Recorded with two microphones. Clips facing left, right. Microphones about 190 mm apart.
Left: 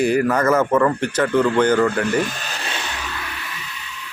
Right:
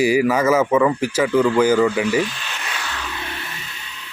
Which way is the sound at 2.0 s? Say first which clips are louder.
Right 1 dB; 50° left (ahead or behind).